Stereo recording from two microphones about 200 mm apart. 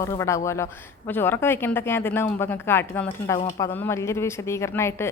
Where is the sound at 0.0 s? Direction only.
15° left (ahead or behind).